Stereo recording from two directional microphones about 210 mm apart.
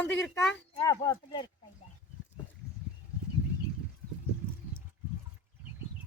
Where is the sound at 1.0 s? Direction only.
20° left (ahead or behind).